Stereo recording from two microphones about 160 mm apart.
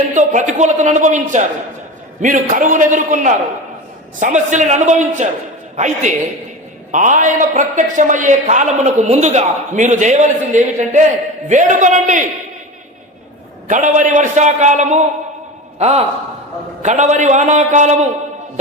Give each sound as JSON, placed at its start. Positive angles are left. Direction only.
{"t": 0.1, "sound": "a man's voice", "side_deg": -50}
{"t": 13.7, "sound": "a man's voice", "side_deg": -50}